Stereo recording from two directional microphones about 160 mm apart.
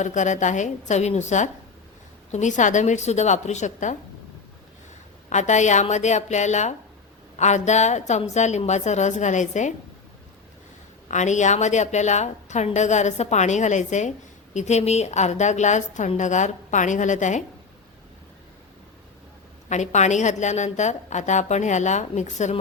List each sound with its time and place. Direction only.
0.0 s a woman's voice: 50° left (ahead or behind)
5.3 s a woman's voice: 50° left (ahead or behind)
11.1 s a woman's voice: 50° left (ahead or behind)
19.6 s a woman's voice: 45° left (ahead or behind)